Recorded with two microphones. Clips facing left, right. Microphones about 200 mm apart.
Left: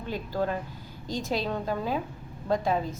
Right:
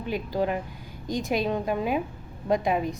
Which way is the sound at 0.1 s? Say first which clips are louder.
Right 3 dB; 15° right (ahead or behind).